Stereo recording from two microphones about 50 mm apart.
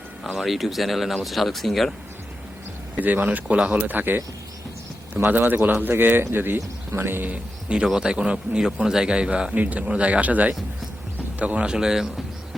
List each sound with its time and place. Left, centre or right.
0.3 s speech: centre
2.9 s speech: right
7.9 s a man's voice: centre
11.7 s speech: centre